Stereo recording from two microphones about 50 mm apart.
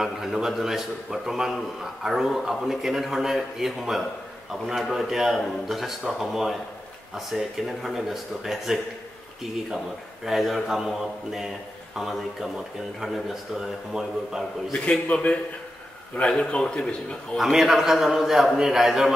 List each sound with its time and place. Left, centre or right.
0.0 s a man's voice: centre
10.2 s a man's voice: centre
14.7 s a man's voice: left
16.2 s a man's voice: left
17.4 s a man's voice: centre